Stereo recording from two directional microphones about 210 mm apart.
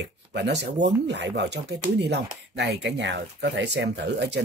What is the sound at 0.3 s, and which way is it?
Speech, 55° right (ahead or behind).